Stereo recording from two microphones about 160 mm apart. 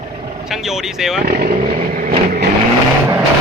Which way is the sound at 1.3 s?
65° right (ahead or behind).